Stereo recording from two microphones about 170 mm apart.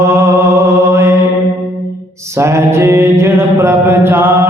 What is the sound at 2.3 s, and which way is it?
Music, 15° right (ahead or behind).